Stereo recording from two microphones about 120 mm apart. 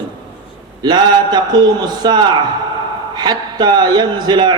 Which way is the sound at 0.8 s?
35° right (ahead or behind).